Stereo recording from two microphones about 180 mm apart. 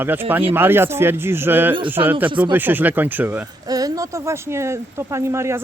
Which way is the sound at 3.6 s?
20° right (ahead or behind).